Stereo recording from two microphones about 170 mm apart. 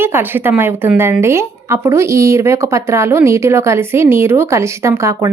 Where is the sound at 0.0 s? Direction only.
15° right (ahead or behind).